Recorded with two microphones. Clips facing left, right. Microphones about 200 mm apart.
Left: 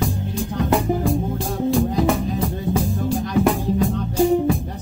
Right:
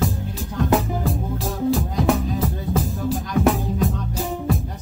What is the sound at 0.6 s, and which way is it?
Music, centre (ahead or behind).